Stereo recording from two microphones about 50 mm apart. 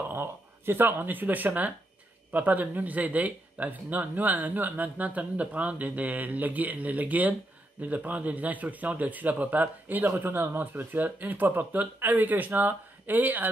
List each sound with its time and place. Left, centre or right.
0.1 s a man's voice: right